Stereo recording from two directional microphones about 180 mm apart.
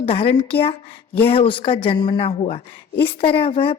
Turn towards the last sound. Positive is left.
turn(degrees=30)  # may be behind; listen again after turning